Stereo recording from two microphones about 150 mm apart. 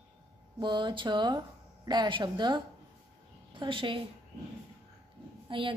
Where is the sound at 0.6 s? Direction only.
30° right (ahead or behind).